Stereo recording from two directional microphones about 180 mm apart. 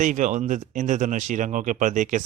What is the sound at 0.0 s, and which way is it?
Speech, 45° right (ahead or behind).